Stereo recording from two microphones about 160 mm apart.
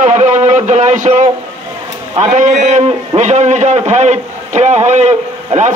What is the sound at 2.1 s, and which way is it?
A man's voice, 50° right (ahead or behind).